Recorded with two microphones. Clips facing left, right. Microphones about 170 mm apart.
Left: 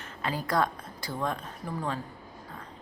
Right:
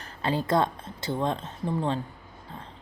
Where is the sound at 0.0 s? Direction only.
30° right (ahead or behind).